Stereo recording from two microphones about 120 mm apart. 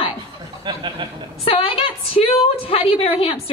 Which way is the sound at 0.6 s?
40° right (ahead or behind).